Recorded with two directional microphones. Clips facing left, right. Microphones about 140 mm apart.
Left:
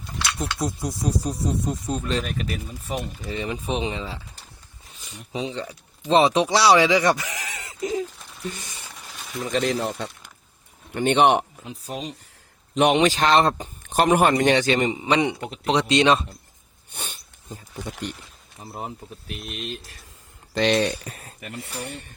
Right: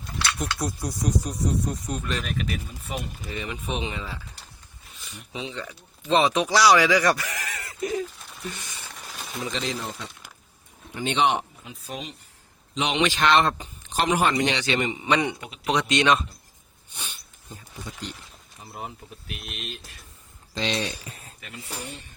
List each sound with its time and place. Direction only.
0.8 s speech: 25° left (ahead or behind)
5.3 s speech: 35° left (ahead or behind)
9.5 s speech: 55° left (ahead or behind)
11.6 s speech: 35° left (ahead or behind)
12.7 s a man's voice: 60° left (ahead or behind)
13.0 s speech: 40° left (ahead or behind)
13.8 s a man's voice: 50° left (ahead or behind); by 16.2 s 30° left (ahead or behind)
16.9 s sneeze: 55° left (ahead or behind)
18.6 s speech: 35° left (ahead or behind)
20.5 s speech: 65° left (ahead or behind)